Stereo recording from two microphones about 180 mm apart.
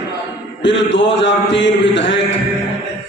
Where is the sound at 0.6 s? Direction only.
85° left.